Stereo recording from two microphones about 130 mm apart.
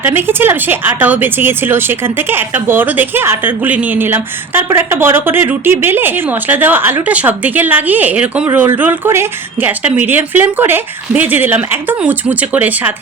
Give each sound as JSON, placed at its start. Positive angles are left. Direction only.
{"t": 0.0, "sound": "speech", "side_deg": -15}